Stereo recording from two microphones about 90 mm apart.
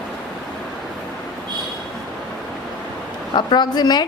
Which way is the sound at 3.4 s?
55° left (ahead or behind).